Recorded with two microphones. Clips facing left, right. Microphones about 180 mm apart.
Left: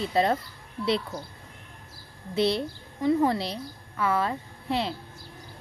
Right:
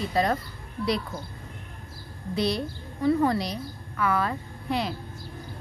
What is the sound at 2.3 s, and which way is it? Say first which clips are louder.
A woman's voice: left 2 dB; 25° left (ahead or behind).